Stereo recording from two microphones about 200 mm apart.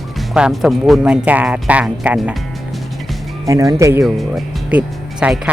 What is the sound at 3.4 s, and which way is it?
Speech, 15° right (ahead or behind).